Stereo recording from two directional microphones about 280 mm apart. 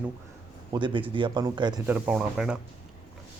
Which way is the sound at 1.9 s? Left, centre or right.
Centre.